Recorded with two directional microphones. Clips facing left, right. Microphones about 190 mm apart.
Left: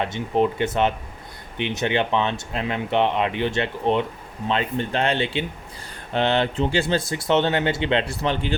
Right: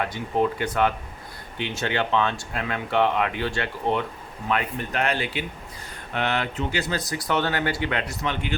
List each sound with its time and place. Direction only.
0.0 s speech: 20° left (ahead or behind)